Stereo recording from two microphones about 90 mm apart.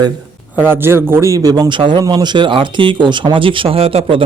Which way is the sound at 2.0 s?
55° right (ahead or behind).